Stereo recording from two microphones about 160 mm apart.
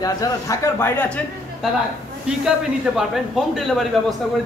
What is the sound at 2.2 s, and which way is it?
A man's voice, 5° right (ahead or behind).